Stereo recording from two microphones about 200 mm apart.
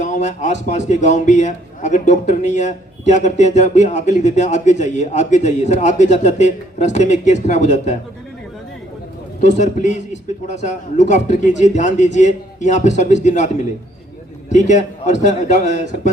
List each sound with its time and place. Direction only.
0.0 s a man's voice: 35° left (ahead or behind)
9.6 s a man's voice: 35° left (ahead or behind)
14.5 s a man's voice: 35° left (ahead or behind)
15.8 s a man's voice: 60° right (ahead or behind)